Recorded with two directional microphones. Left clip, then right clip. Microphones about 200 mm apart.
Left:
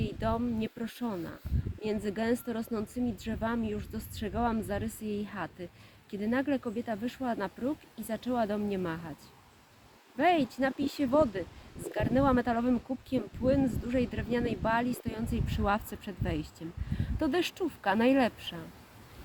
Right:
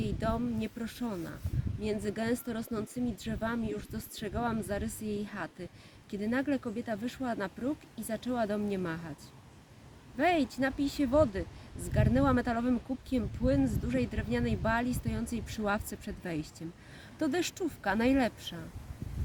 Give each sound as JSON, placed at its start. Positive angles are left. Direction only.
{"t": 0.0, "sound": "speech", "side_deg": -20}
{"t": 10.2, "sound": "speech", "side_deg": -20}